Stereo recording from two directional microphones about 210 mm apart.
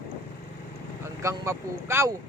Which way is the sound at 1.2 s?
15° right (ahead or behind).